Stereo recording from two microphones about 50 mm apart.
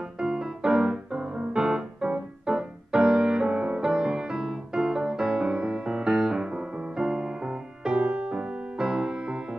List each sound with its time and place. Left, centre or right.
0.2 s music: centre